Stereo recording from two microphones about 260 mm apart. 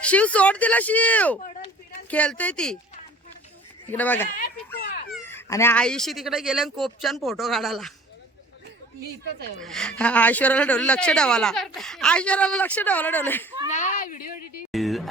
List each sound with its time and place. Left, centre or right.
0.0 s speech: centre
3.8 s a child's voice: centre
9.6 s speech: centre
13.7 s speech: left
14.7 s a sound: centre